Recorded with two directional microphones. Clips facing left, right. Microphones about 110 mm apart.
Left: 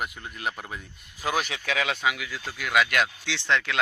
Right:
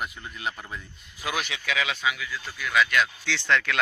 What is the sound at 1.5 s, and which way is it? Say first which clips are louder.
Speech: left 1 dB; 45° left (ahead or behind).